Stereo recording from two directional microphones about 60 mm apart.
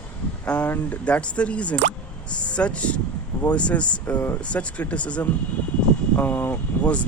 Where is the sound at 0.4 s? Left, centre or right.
Left.